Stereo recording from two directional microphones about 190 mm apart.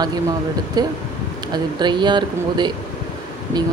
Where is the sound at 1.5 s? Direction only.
25° right (ahead or behind).